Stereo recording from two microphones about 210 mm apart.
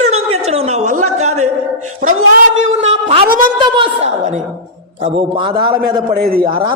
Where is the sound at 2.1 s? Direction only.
70° right (ahead or behind).